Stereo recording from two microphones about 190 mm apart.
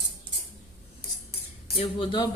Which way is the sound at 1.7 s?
30° left (ahead or behind).